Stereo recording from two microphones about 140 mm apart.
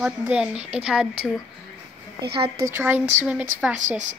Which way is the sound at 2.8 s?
15° right (ahead or behind).